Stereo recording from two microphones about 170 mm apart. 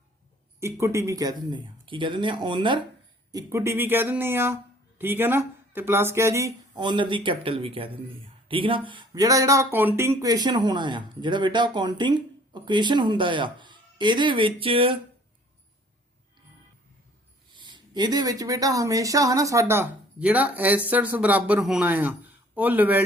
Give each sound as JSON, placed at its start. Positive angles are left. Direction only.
{"t": 0.6, "sound": "speech", "side_deg": -15}
{"t": 3.3, "sound": "speech", "side_deg": -15}
{"t": 17.5, "sound": "speech", "side_deg": -25}